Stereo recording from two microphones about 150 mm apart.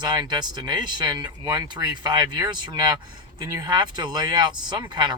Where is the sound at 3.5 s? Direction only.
25° right (ahead or behind).